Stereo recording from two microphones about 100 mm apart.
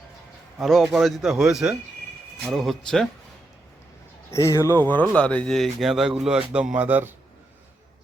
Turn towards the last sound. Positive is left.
turn(degrees=-20)  # may be behind; listen again after turning